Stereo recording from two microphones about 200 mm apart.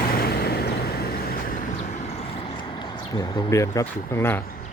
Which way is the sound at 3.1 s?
20° left (ahead or behind).